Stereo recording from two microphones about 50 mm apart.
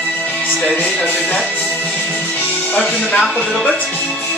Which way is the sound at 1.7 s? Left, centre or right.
Left.